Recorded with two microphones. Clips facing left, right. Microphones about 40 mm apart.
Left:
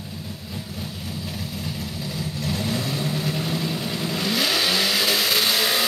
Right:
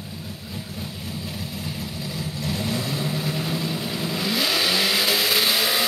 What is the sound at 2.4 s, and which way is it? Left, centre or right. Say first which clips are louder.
Vehicle: even; centre.